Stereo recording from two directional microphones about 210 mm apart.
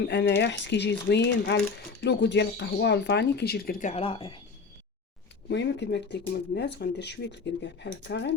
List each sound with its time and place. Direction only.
0.0 s speech: 55° left (ahead or behind); by 4.4 s 25° left (ahead or behind)
5.5 s speech: 55° left (ahead or behind)